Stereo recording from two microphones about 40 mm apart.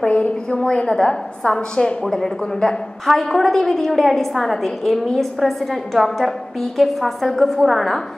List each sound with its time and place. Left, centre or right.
0.0 s a woman's voice: left
0.7 s a woman's voice: left
2.0 s a woman's voice: centre